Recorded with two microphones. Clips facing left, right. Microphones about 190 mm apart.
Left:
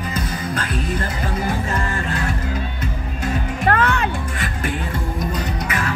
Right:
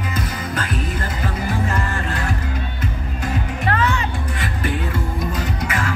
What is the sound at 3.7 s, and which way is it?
Music, 55° left (ahead or behind).